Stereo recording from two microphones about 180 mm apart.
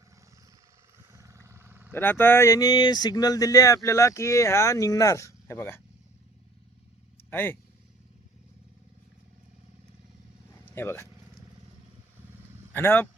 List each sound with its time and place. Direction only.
1.1 s vehicle: 15° right (ahead or behind)
1.9 s speech: 10° left (ahead or behind)
7.2 s speech: 10° left (ahead or behind)
10.7 s speech: 15° left (ahead or behind)
12.7 s speech: 10° left (ahead or behind)